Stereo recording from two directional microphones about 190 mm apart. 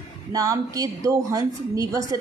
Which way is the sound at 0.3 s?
20° right (ahead or behind).